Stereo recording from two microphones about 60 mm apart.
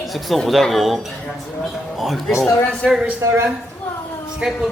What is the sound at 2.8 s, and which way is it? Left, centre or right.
Speech, centre.